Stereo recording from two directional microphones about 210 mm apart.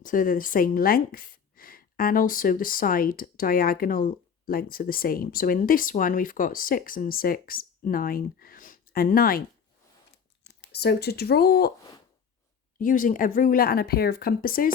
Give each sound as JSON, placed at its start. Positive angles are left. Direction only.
{"t": 0.0, "sound": "speech", "side_deg": 40}
{"t": 10.4, "sound": "speech", "side_deg": 50}
{"t": 12.8, "sound": "speech", "side_deg": 40}